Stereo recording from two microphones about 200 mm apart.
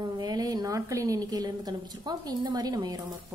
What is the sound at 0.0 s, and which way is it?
A woman's voice, 20° right (ahead or behind).